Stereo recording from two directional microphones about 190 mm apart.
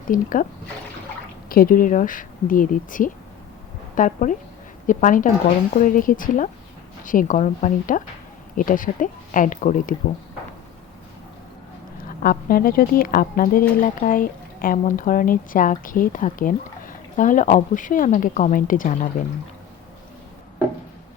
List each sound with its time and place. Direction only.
0.1 s speech: 45° left (ahead or behind)
1.5 s speech: 50° left (ahead or behind)
12.0 s speech: 50° left (ahead or behind)